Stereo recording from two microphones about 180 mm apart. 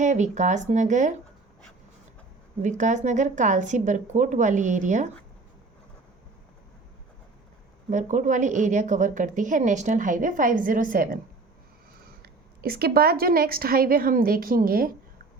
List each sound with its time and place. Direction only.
0.0 s speech: 40° right (ahead or behind)
2.6 s a woman's voice: 40° right (ahead or behind)
7.9 s a woman's voice: 45° right (ahead or behind)